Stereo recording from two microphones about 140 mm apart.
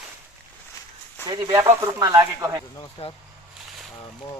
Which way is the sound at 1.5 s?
20° right (ahead or behind).